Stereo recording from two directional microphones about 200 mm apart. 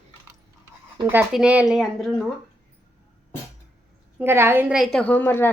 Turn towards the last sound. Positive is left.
turn(degrees=10)  # may be behind; listen again after turning